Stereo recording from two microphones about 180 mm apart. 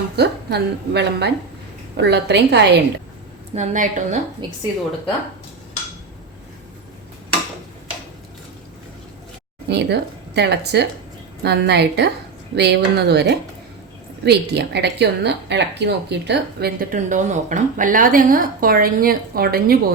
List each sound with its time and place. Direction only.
0.2 s speech: 70° right (ahead or behind)
3.5 s a woman's voice: 40° right (ahead or behind)
4.4 s a woman's voice: 25° right (ahead or behind)
9.6 s speech: 70° right (ahead or behind)
17.1 s a woman's voice: 45° right (ahead or behind)